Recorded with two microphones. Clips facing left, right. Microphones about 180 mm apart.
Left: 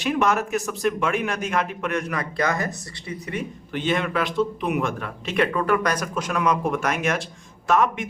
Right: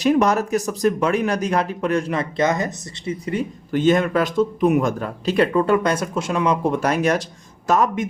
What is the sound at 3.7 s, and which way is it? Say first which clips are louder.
Speech: right 7 dB; 40° right (ahead or behind).